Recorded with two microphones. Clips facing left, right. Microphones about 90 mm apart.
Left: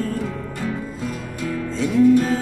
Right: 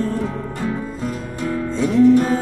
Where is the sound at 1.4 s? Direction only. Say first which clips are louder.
Right 3 dB; 25° right (ahead or behind).